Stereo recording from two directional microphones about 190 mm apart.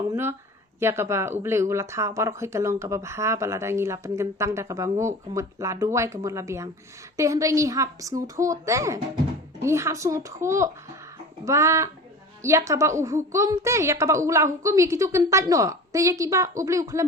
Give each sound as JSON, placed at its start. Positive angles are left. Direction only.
{"t": 0.1, "sound": "speech", "side_deg": -15}